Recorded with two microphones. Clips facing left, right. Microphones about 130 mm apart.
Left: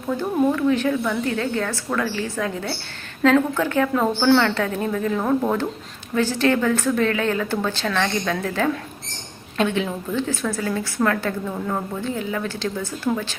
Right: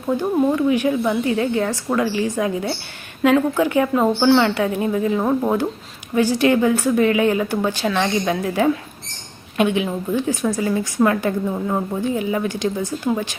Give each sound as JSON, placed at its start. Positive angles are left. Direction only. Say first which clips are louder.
{"t": 0.1, "sound": "a woman's voice", "louder": "right 2 dB", "side_deg": -20}